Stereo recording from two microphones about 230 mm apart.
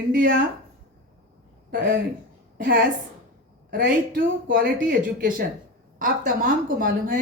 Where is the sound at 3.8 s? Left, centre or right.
Right.